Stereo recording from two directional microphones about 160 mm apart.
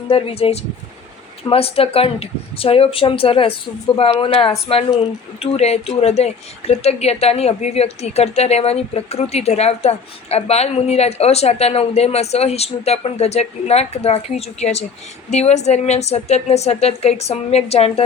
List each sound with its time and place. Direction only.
0.1 s speech: 35° left (ahead or behind)